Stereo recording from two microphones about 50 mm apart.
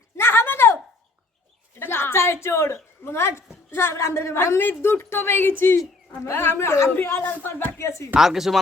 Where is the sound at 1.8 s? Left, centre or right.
Left.